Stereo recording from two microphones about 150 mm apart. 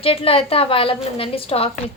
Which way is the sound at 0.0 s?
40° left (ahead or behind).